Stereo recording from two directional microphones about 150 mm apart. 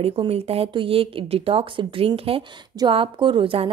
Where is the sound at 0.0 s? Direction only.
40° right (ahead or behind).